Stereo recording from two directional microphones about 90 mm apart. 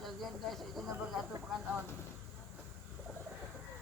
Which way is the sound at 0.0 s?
Centre (ahead or behind).